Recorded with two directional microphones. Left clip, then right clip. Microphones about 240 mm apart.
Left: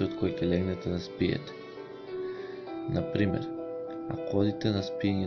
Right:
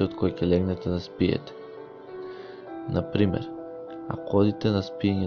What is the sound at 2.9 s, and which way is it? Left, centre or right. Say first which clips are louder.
Speech: right 4 dB; right.